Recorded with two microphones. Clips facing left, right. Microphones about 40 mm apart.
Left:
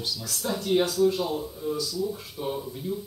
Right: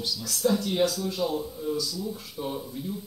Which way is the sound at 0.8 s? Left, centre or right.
Left.